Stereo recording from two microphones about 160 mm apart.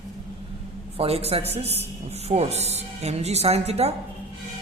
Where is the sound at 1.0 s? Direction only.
40° right (ahead or behind).